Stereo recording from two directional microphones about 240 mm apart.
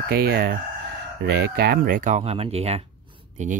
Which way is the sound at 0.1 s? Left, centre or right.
Right.